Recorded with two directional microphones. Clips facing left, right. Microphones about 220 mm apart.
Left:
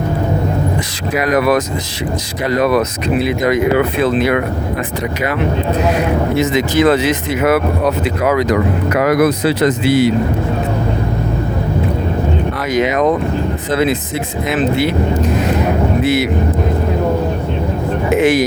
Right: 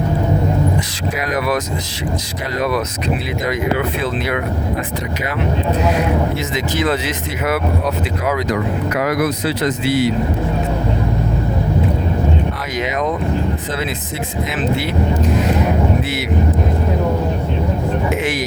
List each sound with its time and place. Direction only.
1.2 s speech: 55° left (ahead or behind)
6.4 s speech: 65° left (ahead or behind)
12.7 s speech: 60° left (ahead or behind)
18.2 s speech: 50° left (ahead or behind)